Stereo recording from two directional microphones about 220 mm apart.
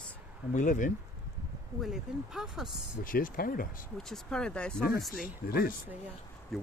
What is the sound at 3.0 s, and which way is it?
Speech, 40° left (ahead or behind).